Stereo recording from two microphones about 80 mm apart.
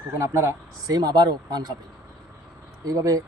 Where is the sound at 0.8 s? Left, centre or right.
Right.